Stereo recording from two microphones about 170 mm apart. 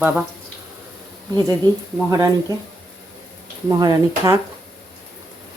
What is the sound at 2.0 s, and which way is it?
Speech, 20° right (ahead or behind).